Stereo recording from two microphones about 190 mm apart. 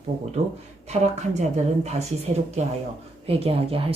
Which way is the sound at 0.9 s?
35° right (ahead or behind).